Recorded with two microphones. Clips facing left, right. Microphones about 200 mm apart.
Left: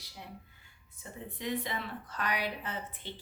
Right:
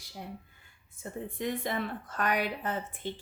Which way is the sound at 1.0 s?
50° right (ahead or behind).